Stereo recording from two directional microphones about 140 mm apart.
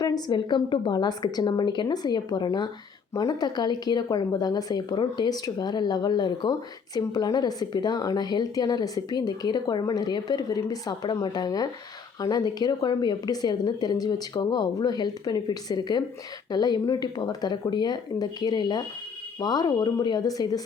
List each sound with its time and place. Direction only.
0.0 s a woman's voice: 30° left (ahead or behind)